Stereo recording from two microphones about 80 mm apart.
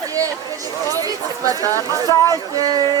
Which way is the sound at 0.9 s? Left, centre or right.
Right.